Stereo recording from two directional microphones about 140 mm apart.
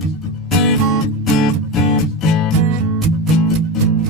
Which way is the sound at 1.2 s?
Centre (ahead or behind).